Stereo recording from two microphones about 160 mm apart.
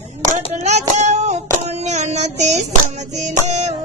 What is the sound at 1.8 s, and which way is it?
Music, 45° right (ahead or behind).